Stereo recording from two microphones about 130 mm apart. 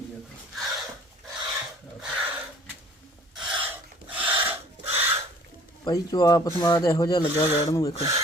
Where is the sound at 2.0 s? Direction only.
5° right (ahead or behind).